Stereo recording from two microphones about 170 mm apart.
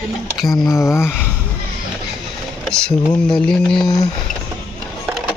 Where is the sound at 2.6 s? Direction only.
5° left (ahead or behind).